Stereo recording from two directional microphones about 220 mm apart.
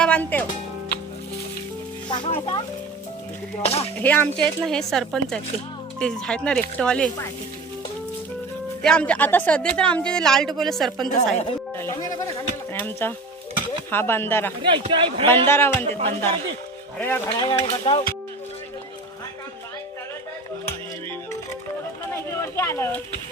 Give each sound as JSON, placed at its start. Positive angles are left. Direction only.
{"t": 0.0, "sound": "speech", "side_deg": 5}
{"t": 2.0, "sound": "a sound", "side_deg": 25}
{"t": 4.0, "sound": "speech", "side_deg": 10}
{"t": 8.8, "sound": "speech", "side_deg": 5}
{"t": 11.8, "sound": "speech", "side_deg": 15}
{"t": 14.6, "sound": "speech", "side_deg": -20}
{"t": 15.3, "sound": "speech", "side_deg": 10}
{"t": 15.8, "sound": "speech", "side_deg": -30}
{"t": 17.0, "sound": "speech", "side_deg": 10}
{"t": 17.4, "sound": "a sound", "side_deg": 25}
{"t": 22.1, "sound": "a sound", "side_deg": 10}